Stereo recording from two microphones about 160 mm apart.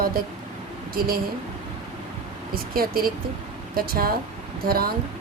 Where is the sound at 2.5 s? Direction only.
65° right (ahead or behind).